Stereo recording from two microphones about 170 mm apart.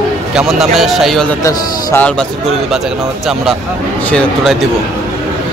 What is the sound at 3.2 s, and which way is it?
A man's voice, centre (ahead or behind).